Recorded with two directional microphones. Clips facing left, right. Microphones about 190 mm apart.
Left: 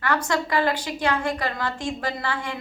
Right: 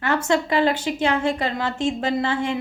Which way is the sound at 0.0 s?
25° right (ahead or behind).